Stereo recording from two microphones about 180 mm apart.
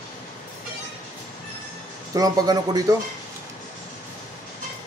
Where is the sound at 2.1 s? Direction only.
20° right (ahead or behind).